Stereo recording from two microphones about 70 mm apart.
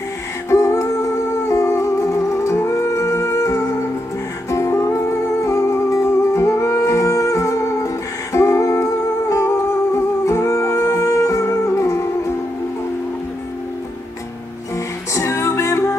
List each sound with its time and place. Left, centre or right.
0.5 s music: left
15.1 s music: left